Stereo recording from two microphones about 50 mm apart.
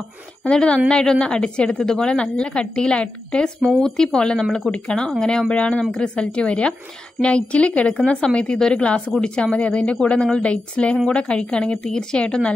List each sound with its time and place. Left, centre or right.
0.5 s a woman's voice: centre
3.8 s a woman's voice: centre